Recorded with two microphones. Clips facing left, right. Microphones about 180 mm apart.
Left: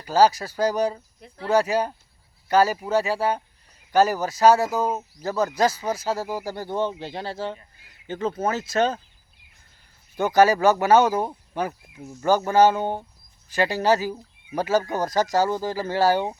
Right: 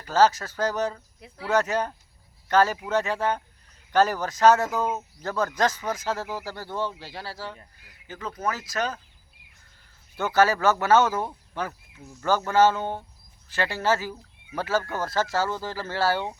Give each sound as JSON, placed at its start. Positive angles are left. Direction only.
{"t": 0.0, "sound": "speech", "side_deg": 15}
{"t": 10.2, "sound": "speech", "side_deg": 15}